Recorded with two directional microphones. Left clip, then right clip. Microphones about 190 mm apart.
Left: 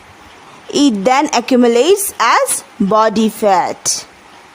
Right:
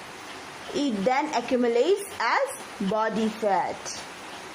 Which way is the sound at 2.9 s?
55° left (ahead or behind).